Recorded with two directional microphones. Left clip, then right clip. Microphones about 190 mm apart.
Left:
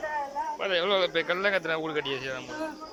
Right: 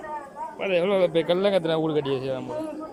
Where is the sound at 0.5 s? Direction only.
10° right (ahead or behind).